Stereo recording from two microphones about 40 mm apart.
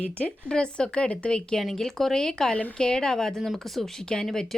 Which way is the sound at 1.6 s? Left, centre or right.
Centre.